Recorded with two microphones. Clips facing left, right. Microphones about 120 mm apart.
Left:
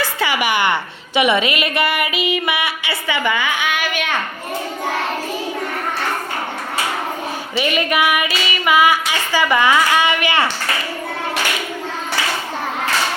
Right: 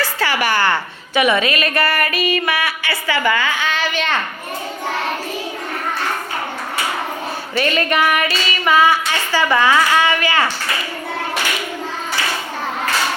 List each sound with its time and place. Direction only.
0.0 s a woman's voice: 15° left (ahead or behind)
7.5 s female singing: 10° left (ahead or behind)